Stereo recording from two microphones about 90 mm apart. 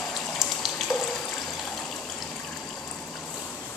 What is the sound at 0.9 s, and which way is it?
Water, 45° left (ahead or behind).